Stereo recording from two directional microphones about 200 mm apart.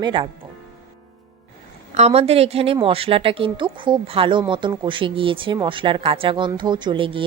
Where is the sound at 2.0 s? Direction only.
30° right (ahead or behind).